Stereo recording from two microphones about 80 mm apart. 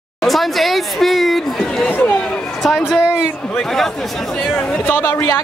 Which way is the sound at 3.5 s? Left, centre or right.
Centre.